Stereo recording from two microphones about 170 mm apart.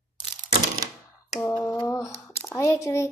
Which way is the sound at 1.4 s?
20° left (ahead or behind).